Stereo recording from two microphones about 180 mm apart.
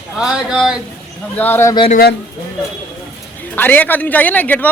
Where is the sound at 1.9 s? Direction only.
55° left (ahead or behind).